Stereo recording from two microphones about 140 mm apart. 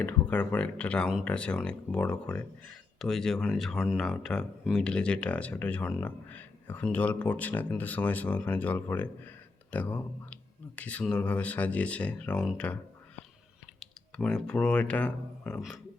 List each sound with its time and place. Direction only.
0.0 s speech: 10° left (ahead or behind)
13.7 s speech: 5° left (ahead or behind)